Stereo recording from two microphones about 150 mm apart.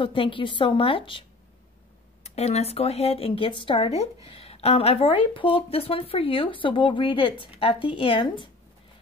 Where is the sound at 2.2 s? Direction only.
45° left (ahead or behind).